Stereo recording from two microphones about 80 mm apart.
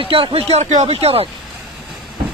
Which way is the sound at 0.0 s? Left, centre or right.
Right.